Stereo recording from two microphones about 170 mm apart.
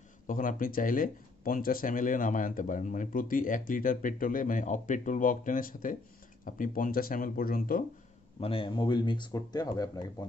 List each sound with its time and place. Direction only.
0.3 s speech: 55° left (ahead or behind)
8.4 s speech: 35° left (ahead or behind)